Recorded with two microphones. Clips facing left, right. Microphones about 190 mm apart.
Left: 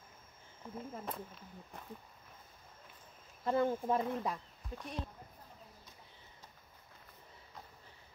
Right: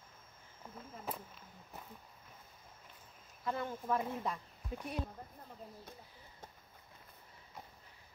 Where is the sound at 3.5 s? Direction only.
30° left (ahead or behind).